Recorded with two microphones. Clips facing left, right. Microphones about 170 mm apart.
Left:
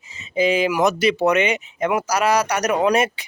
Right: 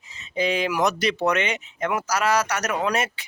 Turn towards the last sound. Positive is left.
turn(degrees=15)  # may be behind; listen again after turning